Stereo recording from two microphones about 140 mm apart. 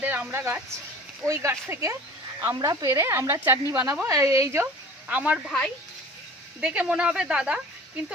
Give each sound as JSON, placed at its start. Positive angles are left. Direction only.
{"t": 0.0, "sound": "speech", "side_deg": -15}
{"t": 6.6, "sound": "speech", "side_deg": -5}